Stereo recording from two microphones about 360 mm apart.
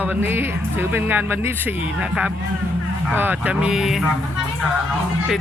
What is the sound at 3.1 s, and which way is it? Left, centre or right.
Speech, centre.